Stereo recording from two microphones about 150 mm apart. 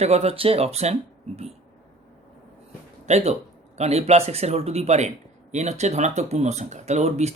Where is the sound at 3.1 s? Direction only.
45° right (ahead or behind).